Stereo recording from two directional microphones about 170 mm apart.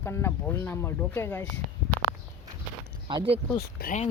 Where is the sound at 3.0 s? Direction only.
30° right (ahead or behind).